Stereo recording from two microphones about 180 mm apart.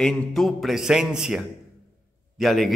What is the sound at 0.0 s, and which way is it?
A man's voice, centre (ahead or behind).